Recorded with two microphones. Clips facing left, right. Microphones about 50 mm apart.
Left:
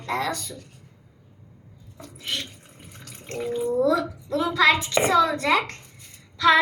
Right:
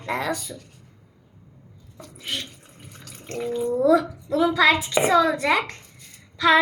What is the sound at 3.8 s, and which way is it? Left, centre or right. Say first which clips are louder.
Speech: right 7 dB; centre.